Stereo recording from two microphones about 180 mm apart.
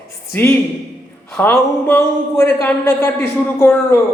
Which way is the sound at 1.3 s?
10° left (ahead or behind).